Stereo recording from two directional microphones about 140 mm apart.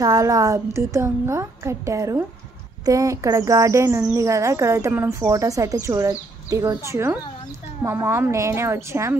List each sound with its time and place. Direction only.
0.0 s speech: 25° right (ahead or behind)